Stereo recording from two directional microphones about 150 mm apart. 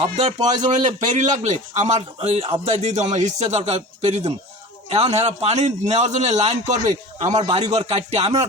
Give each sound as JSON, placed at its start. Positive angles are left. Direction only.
{"t": 0.0, "sound": "a man's voice", "side_deg": -45}
{"t": 0.5, "sound": "a man's voice", "side_deg": -55}